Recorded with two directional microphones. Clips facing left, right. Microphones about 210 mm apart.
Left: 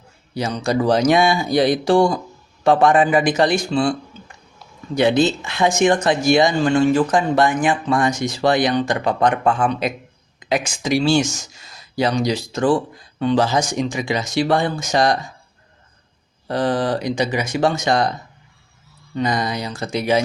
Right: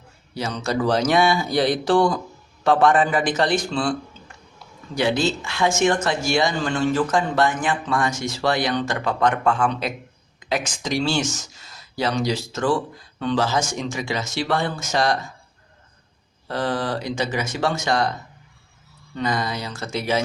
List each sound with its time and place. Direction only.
0.3 s speech: 15° left (ahead or behind)
4.9 s speech: 20° left (ahead or behind)
16.5 s speech: 15° left (ahead or behind)
19.1 s speech: 15° left (ahead or behind)